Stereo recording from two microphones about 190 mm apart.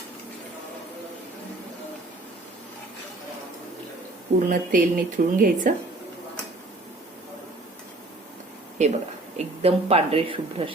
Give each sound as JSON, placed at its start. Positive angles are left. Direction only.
{"t": 4.4, "sound": "speech", "side_deg": -45}
{"t": 8.8, "sound": "speech", "side_deg": -35}